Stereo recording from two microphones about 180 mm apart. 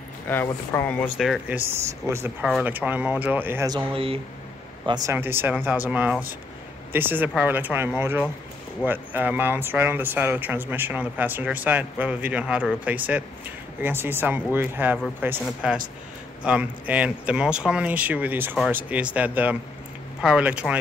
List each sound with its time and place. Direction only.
0.3 s speech: 10° left (ahead or behind); by 3.8 s 15° right (ahead or behind)
3.9 s speech: 30° right (ahead or behind)
4.8 s speech: 20° right (ahead or behind)